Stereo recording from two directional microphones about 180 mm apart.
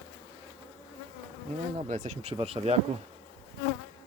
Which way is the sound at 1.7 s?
45° right (ahead or behind).